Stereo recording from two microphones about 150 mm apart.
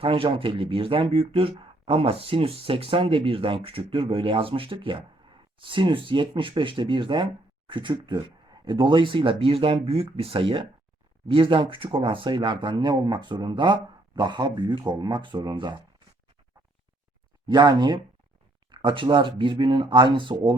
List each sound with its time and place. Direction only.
0.0 s speech: 35° right (ahead or behind)
17.4 s speech: 30° right (ahead or behind)